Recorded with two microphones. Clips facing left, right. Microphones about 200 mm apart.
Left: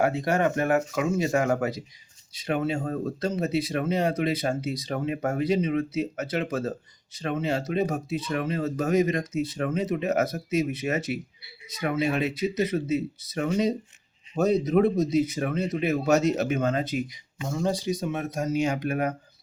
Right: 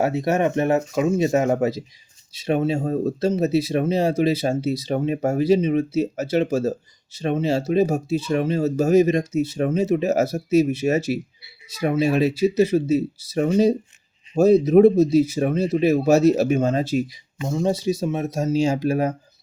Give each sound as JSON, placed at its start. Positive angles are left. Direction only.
{"t": 0.0, "sound": "speech", "side_deg": -25}